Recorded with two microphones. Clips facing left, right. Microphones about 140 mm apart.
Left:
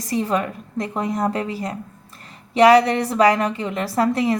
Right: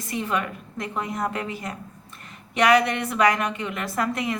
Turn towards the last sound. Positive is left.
turn(degrees=30)  # may be behind; listen again after turning